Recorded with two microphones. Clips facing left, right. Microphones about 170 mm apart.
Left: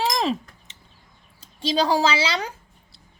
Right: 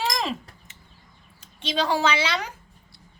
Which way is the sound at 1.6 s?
35° left (ahead or behind).